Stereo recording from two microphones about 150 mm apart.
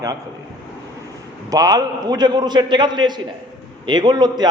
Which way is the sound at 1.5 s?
25° right (ahead or behind).